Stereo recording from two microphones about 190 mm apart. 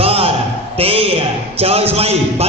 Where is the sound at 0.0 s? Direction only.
30° right (ahead or behind).